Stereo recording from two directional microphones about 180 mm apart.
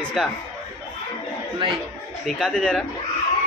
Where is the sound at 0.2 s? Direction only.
Centre (ahead or behind).